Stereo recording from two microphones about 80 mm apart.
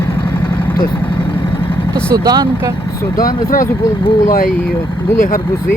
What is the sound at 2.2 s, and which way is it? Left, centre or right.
Speech, right.